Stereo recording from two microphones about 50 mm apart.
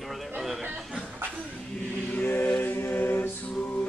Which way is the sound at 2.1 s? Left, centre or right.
Left.